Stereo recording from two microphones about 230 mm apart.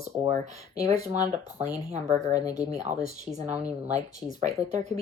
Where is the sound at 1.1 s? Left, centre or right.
Right.